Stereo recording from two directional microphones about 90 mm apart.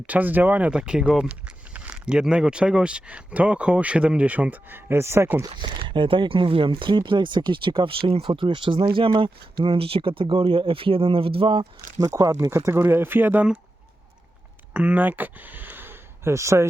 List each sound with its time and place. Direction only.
0.1 s speech: 20° right (ahead or behind)
5.5 s speech: 65° right (ahead or behind)
9.6 s speech: 90° right
11.9 s speech: 35° right (ahead or behind); by 13.6 s 15° right (ahead or behind)
14.7 s speech: 15° right (ahead or behind); by 16.6 s 30° right (ahead or behind)